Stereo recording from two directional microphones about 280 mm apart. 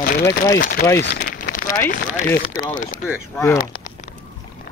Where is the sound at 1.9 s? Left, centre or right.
Left.